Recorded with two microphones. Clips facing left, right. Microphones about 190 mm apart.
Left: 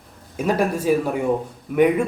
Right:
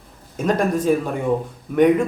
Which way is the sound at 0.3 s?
10° left (ahead or behind).